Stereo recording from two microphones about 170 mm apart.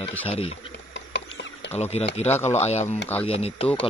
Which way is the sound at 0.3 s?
35° left (ahead or behind).